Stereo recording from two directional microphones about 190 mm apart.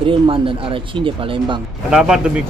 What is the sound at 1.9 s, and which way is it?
Speech, 5° right (ahead or behind).